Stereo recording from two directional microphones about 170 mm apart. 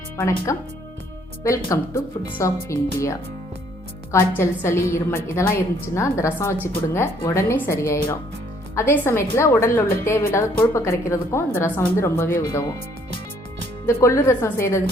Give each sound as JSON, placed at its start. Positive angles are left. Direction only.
{"t": 0.2, "sound": "speech", "side_deg": 15}
{"t": 4.1, "sound": "a woman's voice", "side_deg": 15}
{"t": 13.8, "sound": "speech", "side_deg": 15}